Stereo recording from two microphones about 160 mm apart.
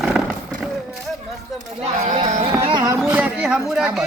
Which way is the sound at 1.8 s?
45° right (ahead or behind).